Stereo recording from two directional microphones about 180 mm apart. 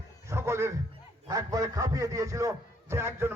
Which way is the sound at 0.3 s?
15° right (ahead or behind).